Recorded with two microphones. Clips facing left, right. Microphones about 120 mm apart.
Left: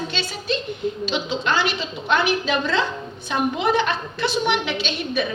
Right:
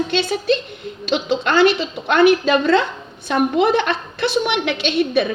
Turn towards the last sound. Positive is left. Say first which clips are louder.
# right 7 dB
turn(degrees=-55)  # may be behind; listen again after turning